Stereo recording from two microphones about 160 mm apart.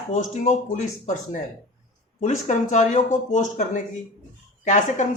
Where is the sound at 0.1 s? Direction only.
45° left (ahead or behind).